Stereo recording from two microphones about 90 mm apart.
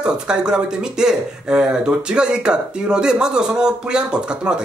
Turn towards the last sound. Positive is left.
turn(degrees=-10)  # may be behind; listen again after turning